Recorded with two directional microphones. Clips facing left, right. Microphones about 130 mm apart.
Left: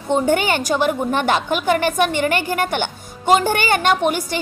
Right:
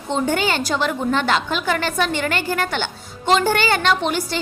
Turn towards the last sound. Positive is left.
turn(degrees=15)  # may be behind; listen again after turning